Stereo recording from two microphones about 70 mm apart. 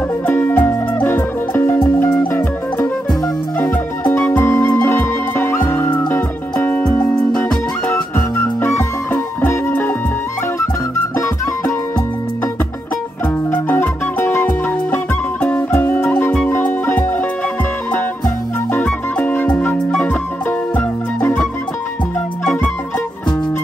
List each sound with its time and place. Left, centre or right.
0.3 s music: left
3.5 s music: left
7.9 s music: left
13.5 s music: left
18.7 s music: left
19.9 s music: centre
20.7 s music: left